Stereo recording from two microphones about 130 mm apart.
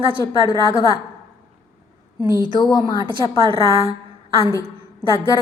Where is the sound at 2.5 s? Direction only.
35° left (ahead or behind).